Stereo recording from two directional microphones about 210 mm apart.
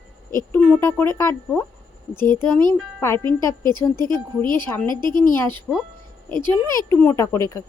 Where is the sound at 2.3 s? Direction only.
10° left (ahead or behind).